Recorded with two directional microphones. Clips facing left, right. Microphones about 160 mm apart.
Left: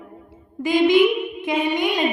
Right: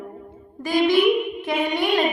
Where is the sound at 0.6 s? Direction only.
20° left (ahead or behind).